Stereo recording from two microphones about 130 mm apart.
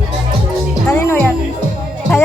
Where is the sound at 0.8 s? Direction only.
15° left (ahead or behind).